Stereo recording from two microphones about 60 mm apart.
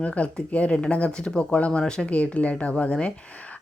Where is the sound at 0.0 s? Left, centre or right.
Left.